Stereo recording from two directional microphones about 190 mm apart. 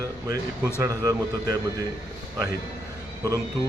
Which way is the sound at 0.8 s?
20° right (ahead or behind).